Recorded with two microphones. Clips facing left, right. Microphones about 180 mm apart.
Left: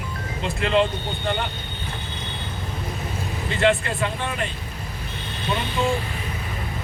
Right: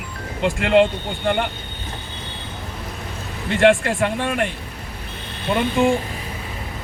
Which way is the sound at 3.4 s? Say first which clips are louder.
Right 6 dB; 80° right.